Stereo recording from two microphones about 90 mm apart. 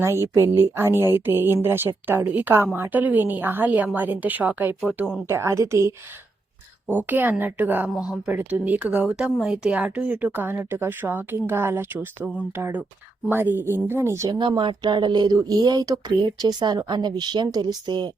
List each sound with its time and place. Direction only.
0.0 s a woman's voice: 30° right (ahead or behind)
6.8 s speech: 20° right (ahead or behind)
14.3 s speech: 55° right (ahead or behind)